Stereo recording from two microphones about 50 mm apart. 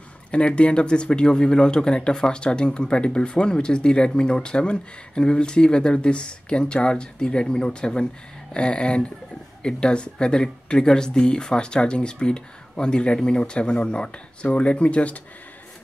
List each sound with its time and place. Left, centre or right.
0.3 s speech: left